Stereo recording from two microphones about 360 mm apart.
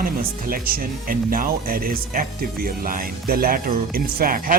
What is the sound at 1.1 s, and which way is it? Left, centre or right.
Speech, right.